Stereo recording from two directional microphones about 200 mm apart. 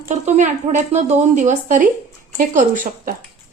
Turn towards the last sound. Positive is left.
turn(degrees=-40)  # may be behind; listen again after turning